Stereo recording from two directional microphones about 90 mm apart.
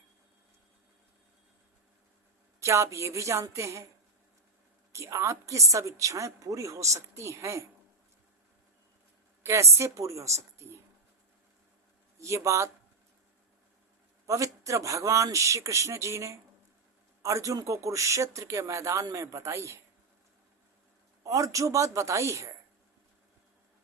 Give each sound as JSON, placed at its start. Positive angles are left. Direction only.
{"t": 2.6, "sound": "a woman's voice", "side_deg": -30}
{"t": 4.9, "sound": "a woman's voice", "side_deg": -35}
{"t": 9.4, "sound": "a woman's voice", "side_deg": -30}
{"t": 12.2, "sound": "a woman's voice", "side_deg": -35}
{"t": 14.3, "sound": "a woman's voice", "side_deg": -35}
{"t": 21.2, "sound": "a woman's voice", "side_deg": -35}